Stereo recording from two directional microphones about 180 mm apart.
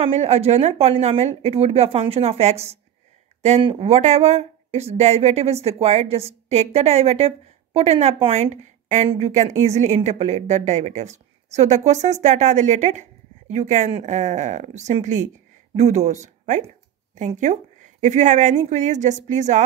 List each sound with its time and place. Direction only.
0.0 s speech: 35° right (ahead or behind)